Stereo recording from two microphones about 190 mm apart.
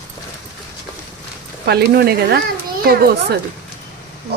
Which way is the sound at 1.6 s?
55° right (ahead or behind).